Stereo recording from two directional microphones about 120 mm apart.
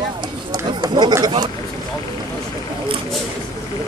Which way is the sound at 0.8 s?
40° right (ahead or behind).